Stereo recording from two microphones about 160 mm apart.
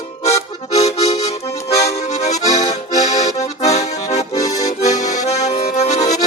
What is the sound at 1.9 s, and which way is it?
Accordion, 45° left (ahead or behind).